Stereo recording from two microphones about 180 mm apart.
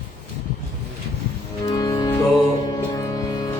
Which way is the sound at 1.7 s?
20° left (ahead or behind).